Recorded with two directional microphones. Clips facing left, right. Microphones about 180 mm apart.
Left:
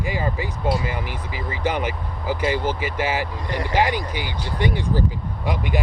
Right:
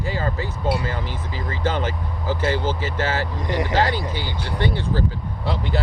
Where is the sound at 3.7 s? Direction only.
15° left (ahead or behind).